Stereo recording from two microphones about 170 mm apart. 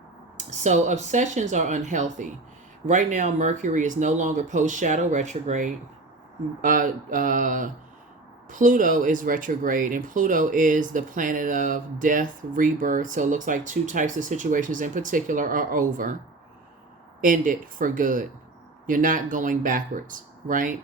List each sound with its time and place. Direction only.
0.3 s speech: 45° right (ahead or behind)
17.2 s speech: 50° right (ahead or behind)